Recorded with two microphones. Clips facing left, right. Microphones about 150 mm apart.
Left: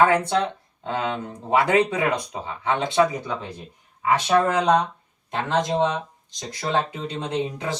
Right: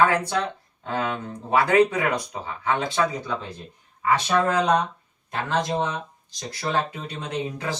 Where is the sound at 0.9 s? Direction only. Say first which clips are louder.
Left 1 dB; 20° left (ahead or behind).